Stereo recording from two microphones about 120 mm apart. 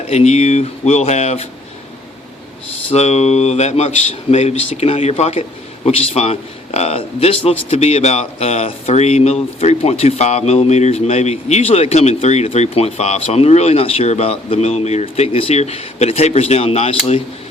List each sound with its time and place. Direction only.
0.1 s speech: 65° left (ahead or behind)
2.9 s speech: 60° left (ahead or behind)